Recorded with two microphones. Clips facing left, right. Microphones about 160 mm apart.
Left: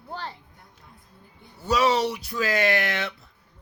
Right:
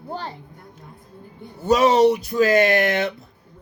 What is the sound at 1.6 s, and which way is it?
A child's voice, 50° right (ahead or behind).